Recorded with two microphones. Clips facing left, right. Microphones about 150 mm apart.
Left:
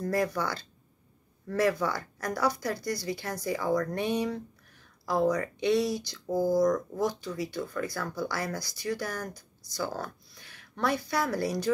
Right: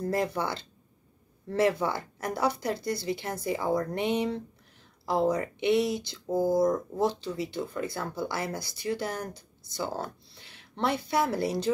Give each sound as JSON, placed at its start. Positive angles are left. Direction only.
{"t": 0.0, "sound": "speech", "side_deg": -25}